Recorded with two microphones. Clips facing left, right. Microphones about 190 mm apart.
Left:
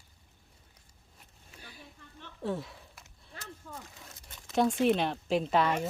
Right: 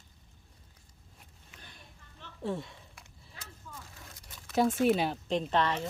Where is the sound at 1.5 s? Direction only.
10° left (ahead or behind).